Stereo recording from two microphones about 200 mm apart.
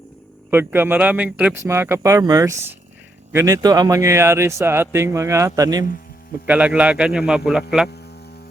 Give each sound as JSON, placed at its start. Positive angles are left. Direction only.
{"t": 0.5, "sound": "speech", "side_deg": -10}
{"t": 6.5, "sound": "a man's voice", "side_deg": -5}